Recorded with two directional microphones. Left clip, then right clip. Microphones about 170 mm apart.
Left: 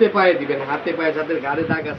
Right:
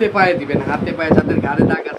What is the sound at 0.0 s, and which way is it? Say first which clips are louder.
Speech: right 1 dB; 20° right (ahead or behind).